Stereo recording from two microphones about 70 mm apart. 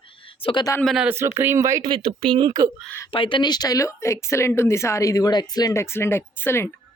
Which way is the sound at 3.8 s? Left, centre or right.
Left.